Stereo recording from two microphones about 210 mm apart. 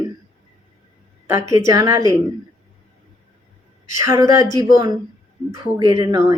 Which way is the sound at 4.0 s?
15° right (ahead or behind).